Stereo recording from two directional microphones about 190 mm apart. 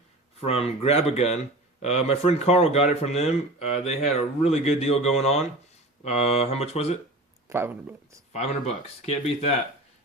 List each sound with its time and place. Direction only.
0.3 s speech: 30° left (ahead or behind)
7.4 s speech: 10° right (ahead or behind)
8.3 s speech: 35° left (ahead or behind)